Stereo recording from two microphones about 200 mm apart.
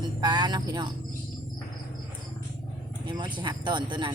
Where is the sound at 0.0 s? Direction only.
20° right (ahead or behind).